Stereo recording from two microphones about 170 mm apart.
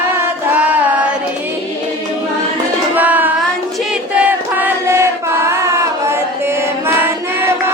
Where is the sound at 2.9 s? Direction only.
10° right (ahead or behind).